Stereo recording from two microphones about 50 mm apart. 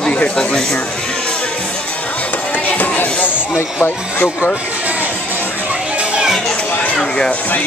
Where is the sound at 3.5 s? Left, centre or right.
Left.